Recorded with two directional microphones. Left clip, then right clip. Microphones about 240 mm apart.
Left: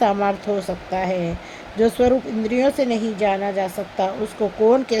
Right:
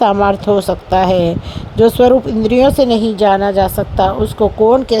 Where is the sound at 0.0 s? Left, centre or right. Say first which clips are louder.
Right 7 dB; right.